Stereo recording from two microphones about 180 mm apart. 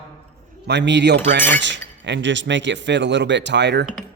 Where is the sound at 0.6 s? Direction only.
75° right (ahead or behind).